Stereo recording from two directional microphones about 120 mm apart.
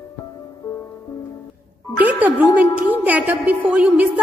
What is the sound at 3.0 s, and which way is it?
A woman's voice, 15° right (ahead or behind).